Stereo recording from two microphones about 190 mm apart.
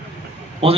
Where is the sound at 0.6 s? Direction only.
30° right (ahead or behind).